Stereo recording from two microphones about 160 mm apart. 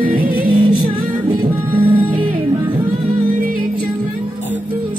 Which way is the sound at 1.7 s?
35° right (ahead or behind).